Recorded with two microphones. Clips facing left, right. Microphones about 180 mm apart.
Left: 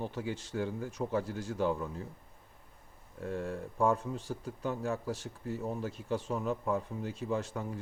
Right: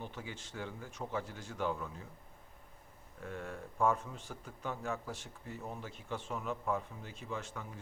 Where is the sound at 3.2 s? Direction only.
30° left (ahead or behind).